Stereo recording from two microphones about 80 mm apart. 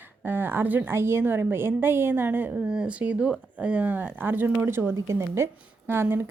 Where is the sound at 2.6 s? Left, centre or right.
Centre.